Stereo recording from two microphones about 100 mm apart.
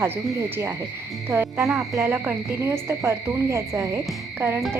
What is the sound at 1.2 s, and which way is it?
Cricket, 25° right (ahead or behind).